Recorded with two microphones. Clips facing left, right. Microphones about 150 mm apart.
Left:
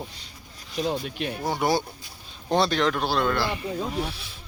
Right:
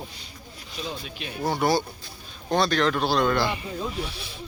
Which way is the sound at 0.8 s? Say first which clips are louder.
Left 7 dB; 50° left (ahead or behind).